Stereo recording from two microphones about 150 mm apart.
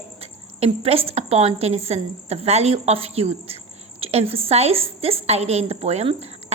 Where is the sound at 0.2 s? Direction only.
40° right (ahead or behind).